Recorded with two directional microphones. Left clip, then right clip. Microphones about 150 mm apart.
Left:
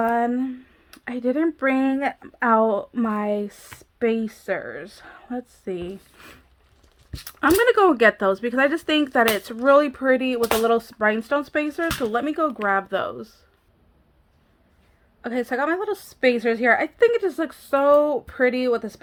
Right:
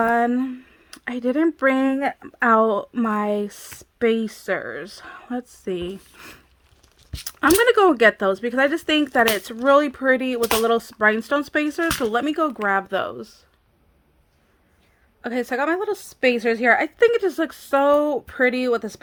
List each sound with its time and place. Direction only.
0.0 s a woman's voice: 40° right (ahead or behind); by 13.4 s 25° right (ahead or behind)
15.2 s a woman's voice: 25° right (ahead or behind)